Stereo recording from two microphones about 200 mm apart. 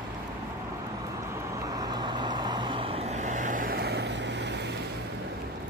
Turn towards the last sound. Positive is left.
turn(degrees=-60)  # may be behind; listen again after turning